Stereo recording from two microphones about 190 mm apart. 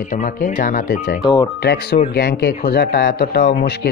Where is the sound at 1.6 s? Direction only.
60° left (ahead or behind).